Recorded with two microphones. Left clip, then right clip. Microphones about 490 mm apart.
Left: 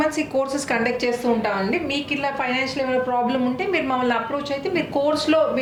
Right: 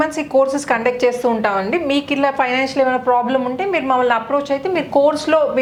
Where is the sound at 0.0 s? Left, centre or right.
Right.